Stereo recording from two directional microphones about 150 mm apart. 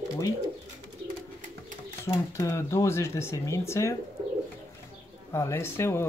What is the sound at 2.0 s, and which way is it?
Speech, 20° left (ahead or behind).